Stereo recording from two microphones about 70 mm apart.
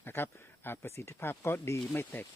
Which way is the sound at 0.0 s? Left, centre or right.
Left.